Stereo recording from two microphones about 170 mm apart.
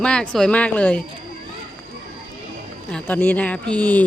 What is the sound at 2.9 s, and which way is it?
Speech, 10° left (ahead or behind).